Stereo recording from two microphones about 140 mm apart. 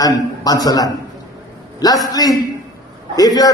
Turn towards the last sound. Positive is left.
turn(degrees=25)  # may be behind; listen again after turning